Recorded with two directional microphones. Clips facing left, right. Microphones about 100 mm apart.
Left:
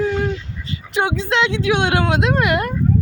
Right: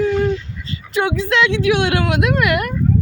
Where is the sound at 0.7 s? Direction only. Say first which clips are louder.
Right 1 dB; 20° left (ahead or behind).